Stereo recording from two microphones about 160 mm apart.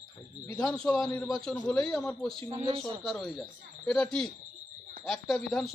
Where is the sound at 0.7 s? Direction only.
5° left (ahead or behind).